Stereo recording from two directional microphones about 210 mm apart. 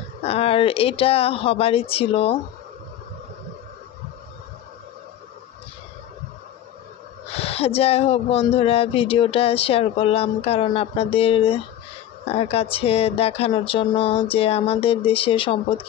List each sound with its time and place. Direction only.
0.2 s speech: 30° left (ahead or behind)
7.2 s speech: 30° left (ahead or behind)